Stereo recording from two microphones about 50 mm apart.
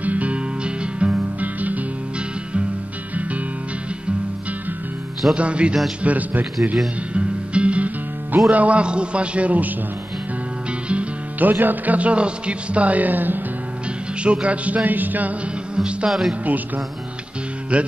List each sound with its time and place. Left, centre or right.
0.0 s music: right
3.2 s music: right
5.3 s a man's voice: right
6.0 s a man's voice: right
7.2 s music: right
8.5 s a man's voice: right
10.9 s music: right
11.4 s a man's voice: right
14.2 s a man's voice: right
15.7 s speech: right
16.1 s speech: centre
16.4 s a man's voice: right
17.7 s a man's voice: right